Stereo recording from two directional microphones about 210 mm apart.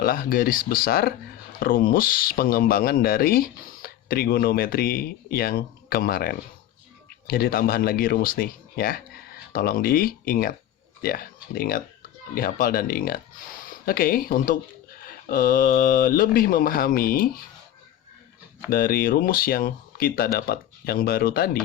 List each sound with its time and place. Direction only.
0.0 s speech: 45° left (ahead or behind)
18.7 s speech: 45° left (ahead or behind)